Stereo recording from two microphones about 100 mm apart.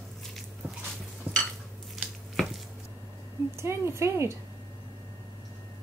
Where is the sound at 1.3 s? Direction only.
15° right (ahead or behind).